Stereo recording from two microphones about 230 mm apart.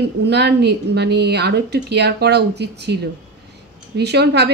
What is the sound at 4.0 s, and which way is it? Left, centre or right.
Speech, right.